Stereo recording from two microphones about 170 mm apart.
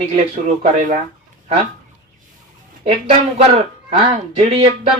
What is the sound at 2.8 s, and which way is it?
Speech, 35° right (ahead or behind).